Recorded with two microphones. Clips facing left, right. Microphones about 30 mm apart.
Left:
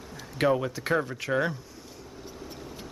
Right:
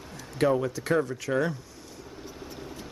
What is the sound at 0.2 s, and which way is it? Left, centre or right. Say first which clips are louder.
Speech: even; centre.